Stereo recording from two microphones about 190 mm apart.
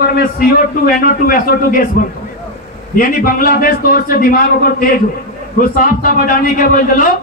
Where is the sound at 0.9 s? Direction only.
50° left (ahead or behind).